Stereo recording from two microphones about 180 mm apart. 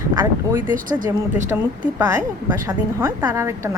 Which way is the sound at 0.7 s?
50° right (ahead or behind).